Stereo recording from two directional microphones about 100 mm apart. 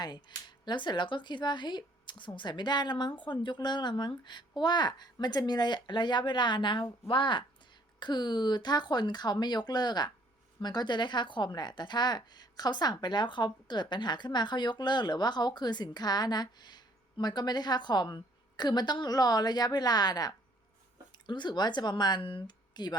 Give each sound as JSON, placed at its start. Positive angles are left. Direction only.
{"t": 0.0, "sound": "speech", "side_deg": 45}